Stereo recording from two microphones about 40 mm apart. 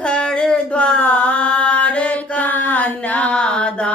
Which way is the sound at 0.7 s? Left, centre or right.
Left.